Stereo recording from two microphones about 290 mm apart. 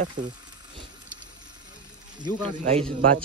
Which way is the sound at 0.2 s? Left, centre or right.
Right.